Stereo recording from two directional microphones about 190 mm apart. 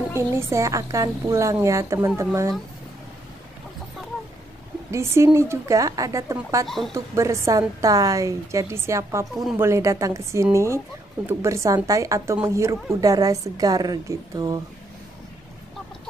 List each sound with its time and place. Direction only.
0.4 s a woman's voice: 15° right (ahead or behind)
4.9 s a woman's voice: 15° right (ahead or behind)
9.3 s speech: centre (ahead or behind)
9.6 s a woman's voice: 15° right (ahead or behind)